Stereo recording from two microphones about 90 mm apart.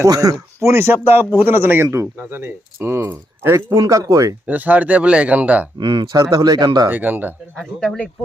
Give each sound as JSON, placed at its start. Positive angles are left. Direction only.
{"t": 0.0, "sound": "speech", "side_deg": -40}
{"t": 0.6, "sound": "speech", "side_deg": -30}
{"t": 4.4, "sound": "speech", "side_deg": -20}
{"t": 5.7, "sound": "speech", "side_deg": -60}
{"t": 6.9, "sound": "speech", "side_deg": -20}
{"t": 7.6, "sound": "speech", "side_deg": 5}